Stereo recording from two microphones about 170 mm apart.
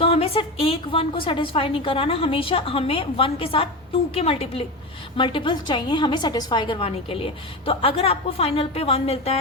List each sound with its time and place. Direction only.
0.0 s a woman's voice: 35° left (ahead or behind)